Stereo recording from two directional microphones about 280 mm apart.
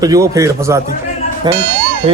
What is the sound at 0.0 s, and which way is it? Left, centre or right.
A man's voice, centre.